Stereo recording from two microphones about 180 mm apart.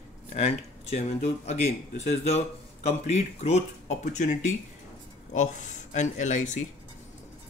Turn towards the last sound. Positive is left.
turn(degrees=40)  # may be behind; listen again after turning